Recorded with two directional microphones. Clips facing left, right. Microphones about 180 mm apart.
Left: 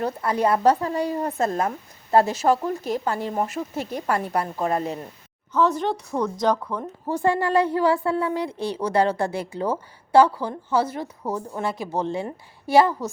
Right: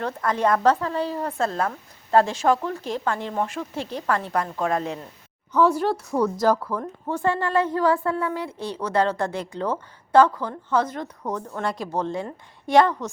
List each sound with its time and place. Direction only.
0.0 s speech: 10° left (ahead or behind)
5.5 s a woman's voice: 10° right (ahead or behind)
7.3 s speech: 10° left (ahead or behind)